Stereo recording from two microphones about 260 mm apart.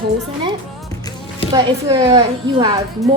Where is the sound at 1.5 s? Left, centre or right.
Centre.